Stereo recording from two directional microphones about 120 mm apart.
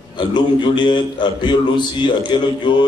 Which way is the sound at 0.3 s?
40° left (ahead or behind).